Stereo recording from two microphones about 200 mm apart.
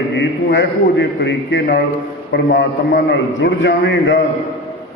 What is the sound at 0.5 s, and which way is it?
A man's voice, 60° left (ahead or behind).